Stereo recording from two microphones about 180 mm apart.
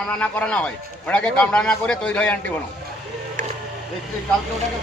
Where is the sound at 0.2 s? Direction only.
10° left (ahead or behind).